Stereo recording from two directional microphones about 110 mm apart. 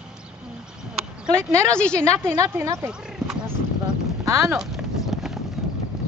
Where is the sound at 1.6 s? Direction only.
10° left (ahead or behind).